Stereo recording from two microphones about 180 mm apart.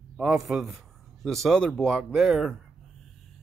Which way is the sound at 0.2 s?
5° right (ahead or behind).